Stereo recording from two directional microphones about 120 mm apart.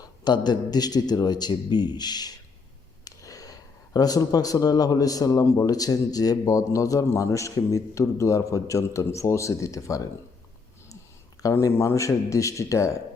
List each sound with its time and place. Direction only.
0.0 s a man's voice: 35° left (ahead or behind)
11.4 s speech: 25° left (ahead or behind)